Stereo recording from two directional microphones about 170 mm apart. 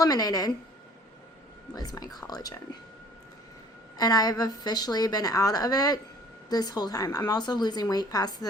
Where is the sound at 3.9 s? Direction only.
20° left (ahead or behind).